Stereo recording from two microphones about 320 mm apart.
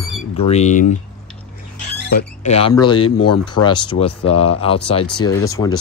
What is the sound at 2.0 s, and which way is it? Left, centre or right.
Speech, left.